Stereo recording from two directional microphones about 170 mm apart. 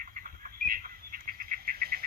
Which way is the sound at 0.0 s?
55° right (ahead or behind).